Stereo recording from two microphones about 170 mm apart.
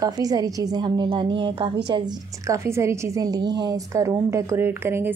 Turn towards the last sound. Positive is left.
turn(degrees=-15)  # may be behind; listen again after turning